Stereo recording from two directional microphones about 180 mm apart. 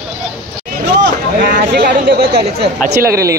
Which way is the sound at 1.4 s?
55° right (ahead or behind).